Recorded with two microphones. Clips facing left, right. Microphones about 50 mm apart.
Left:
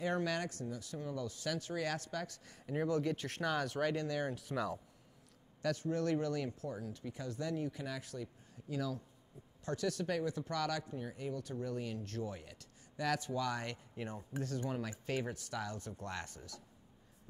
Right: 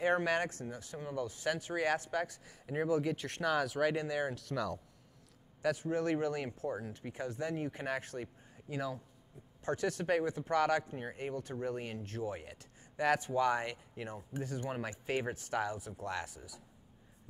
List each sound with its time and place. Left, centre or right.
0.0 s speech: right
2.7 s speech: centre
3.9 s speech: centre
4.4 s speech: centre
5.6 s speech: centre; by 8.7 s right
8.7 s speech: right
12.0 s speech: right
13.9 s speech: centre
14.6 s speech: right
15.7 s speech: centre